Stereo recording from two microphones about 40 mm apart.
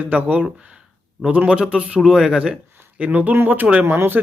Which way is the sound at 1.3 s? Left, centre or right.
Right.